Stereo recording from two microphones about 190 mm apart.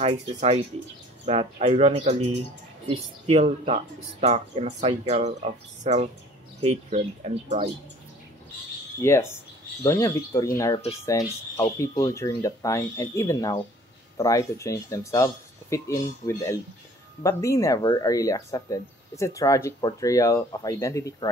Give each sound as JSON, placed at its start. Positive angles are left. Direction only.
{"t": 0.0, "sound": "speech", "side_deg": -35}
{"t": 9.0, "sound": "speech", "side_deg": 15}
{"t": 11.5, "sound": "speech", "side_deg": 20}